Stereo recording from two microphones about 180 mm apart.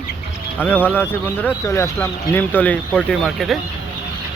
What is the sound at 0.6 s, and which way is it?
Speech, 10° left (ahead or behind).